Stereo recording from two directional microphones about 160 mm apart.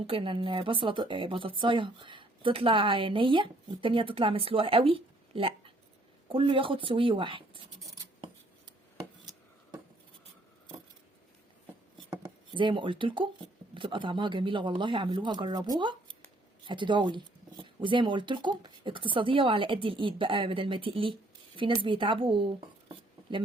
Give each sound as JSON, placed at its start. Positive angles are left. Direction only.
{"t": 0.0, "sound": "speech", "side_deg": -35}
{"t": 12.1, "sound": "speech", "side_deg": -30}